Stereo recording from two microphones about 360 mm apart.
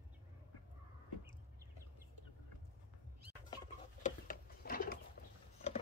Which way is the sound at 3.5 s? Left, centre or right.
Left.